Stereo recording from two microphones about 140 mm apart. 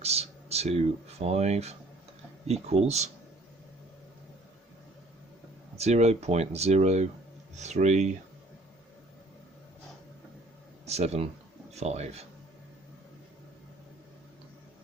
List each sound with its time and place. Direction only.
0.0 s a sound: 50° right (ahead or behind)
1.2 s speech: 50° right (ahead or behind)
5.7 s speech: 50° right (ahead or behind)
10.8 s speech: 50° right (ahead or behind)